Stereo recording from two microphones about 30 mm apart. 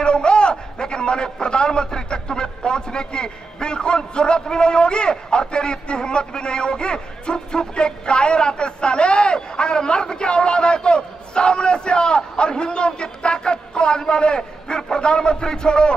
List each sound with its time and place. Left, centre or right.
0.0 s a man's voice: left